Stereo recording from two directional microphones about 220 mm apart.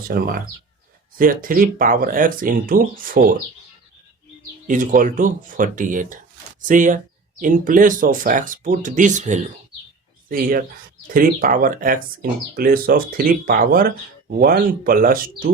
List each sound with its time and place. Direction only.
0.1 s speech: 40° right (ahead or behind)
4.7 s speech: 35° right (ahead or behind)